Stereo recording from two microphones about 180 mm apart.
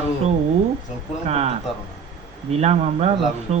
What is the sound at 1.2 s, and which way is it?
Speech, 35° right (ahead or behind).